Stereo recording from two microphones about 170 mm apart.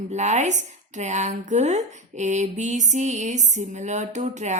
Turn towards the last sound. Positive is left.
turn(degrees=-45)  # may be behind; listen again after turning